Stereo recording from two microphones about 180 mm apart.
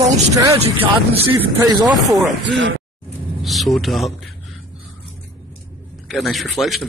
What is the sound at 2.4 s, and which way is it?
Speech, 75° right (ahead or behind).